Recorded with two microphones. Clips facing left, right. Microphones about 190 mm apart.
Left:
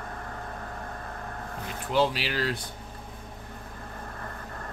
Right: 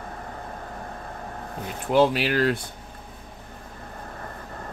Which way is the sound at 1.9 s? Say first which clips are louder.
Right 6 dB; 55° right (ahead or behind).